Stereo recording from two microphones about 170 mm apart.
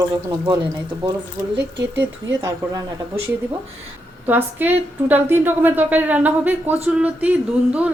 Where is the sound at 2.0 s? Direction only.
10° right (ahead or behind).